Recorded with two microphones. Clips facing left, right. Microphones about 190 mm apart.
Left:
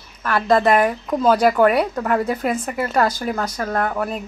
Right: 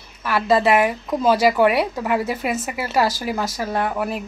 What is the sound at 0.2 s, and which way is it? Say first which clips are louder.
Speech: left 1 dB; 5° right (ahead or behind).